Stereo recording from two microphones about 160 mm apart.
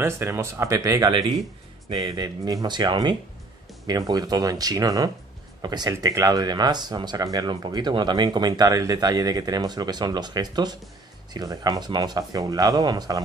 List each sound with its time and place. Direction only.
0.0 s speech: 15° right (ahead or behind)